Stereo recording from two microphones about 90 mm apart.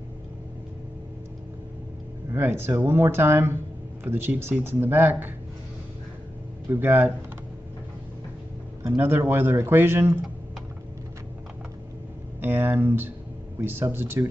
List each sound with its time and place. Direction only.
2.3 s speech: 25° right (ahead or behind)
6.7 s speech: 25° right (ahead or behind)
8.8 s speech: 25° right (ahead or behind)
12.4 s speech: 20° right (ahead or behind)